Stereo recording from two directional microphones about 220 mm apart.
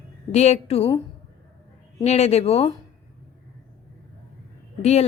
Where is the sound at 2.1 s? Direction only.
30° left (ahead or behind).